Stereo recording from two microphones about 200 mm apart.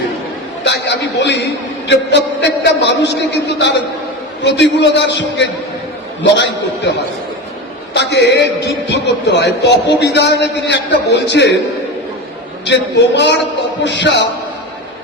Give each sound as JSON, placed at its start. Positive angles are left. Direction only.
{"t": 0.6, "sound": "a man's voice", "side_deg": 60}
{"t": 7.9, "sound": "a man's voice", "side_deg": 60}
{"t": 12.6, "sound": "a man's voice", "side_deg": 60}